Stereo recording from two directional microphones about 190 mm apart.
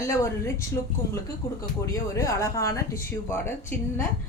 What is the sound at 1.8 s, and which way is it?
Speech, 15° left (ahead or behind).